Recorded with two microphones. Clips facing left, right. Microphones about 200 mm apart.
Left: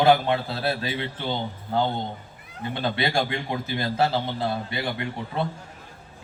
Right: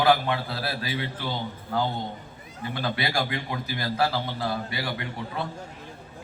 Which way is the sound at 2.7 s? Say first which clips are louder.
Left 3 dB; 25° left (ahead or behind).